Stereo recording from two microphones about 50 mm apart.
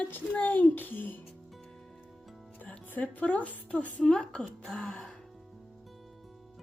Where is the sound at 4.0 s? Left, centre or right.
Left.